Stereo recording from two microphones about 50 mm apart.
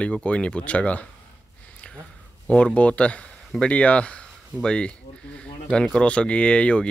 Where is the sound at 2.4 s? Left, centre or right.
Left.